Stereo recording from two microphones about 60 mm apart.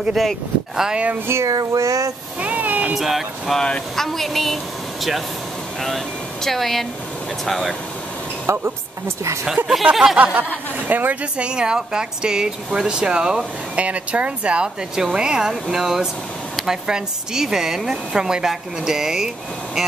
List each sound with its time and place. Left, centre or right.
0.1 s speech: centre
0.8 s speech: centre
1.1 s a sound: right
1.4 s a sound: right
2.4 s cat: right
2.9 s speech: centre
3.5 s speech: centre
3.9 s speech: centre
5.8 s speech: centre
8.5 s a woman's voice: right
9.8 s speech: centre
10.1 s speech: right
11.3 s speech: centre